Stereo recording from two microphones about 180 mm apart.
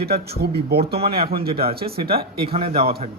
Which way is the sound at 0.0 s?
60° right (ahead or behind).